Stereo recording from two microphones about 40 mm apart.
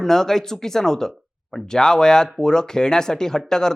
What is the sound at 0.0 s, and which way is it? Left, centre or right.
Speech, centre.